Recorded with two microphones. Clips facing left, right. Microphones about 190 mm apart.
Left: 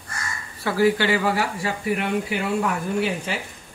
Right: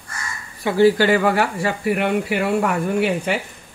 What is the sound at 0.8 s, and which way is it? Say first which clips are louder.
Speech: right 5 dB; 45° right (ahead or behind).